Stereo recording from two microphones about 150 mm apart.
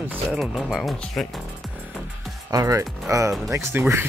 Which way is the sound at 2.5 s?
25° right (ahead or behind).